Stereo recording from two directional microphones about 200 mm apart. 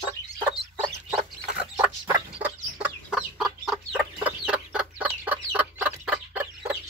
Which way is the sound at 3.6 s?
5° right (ahead or behind).